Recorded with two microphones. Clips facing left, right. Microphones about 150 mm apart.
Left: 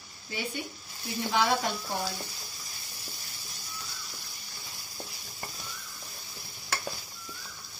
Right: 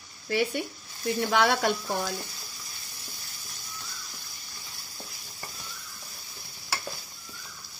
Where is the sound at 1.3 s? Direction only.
65° right (ahead or behind).